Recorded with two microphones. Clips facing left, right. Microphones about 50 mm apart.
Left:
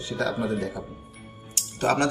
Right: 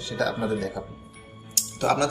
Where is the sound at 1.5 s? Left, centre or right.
Left.